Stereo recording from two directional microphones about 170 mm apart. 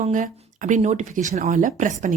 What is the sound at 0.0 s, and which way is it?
Speech, 45° right (ahead or behind).